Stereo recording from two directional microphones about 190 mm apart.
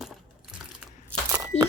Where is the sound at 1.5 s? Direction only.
35° left (ahead or behind).